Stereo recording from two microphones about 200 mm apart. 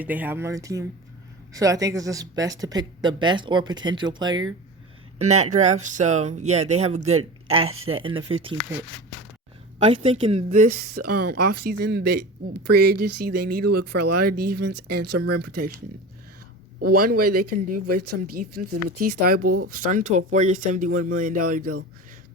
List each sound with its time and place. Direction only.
0.0 s speech: 10° right (ahead or behind)
5.2 s speech: 35° right (ahead or behind)
7.7 s speech: 90° right
8.0 s speech: 25° right (ahead or behind)
9.7 s speech: 30° right (ahead or behind); by 15.7 s 50° right (ahead or behind)
17.0 s speech: 45° right (ahead or behind)